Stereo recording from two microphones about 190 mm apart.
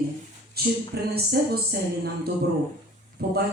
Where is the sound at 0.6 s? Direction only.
55° right (ahead or behind).